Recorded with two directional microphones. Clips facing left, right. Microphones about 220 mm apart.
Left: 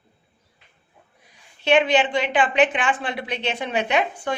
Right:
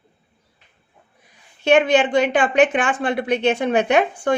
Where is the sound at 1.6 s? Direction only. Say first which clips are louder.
Right 3 dB; 45° right (ahead or behind).